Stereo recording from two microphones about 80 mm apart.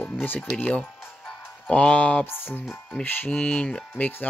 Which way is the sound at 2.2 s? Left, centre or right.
Left.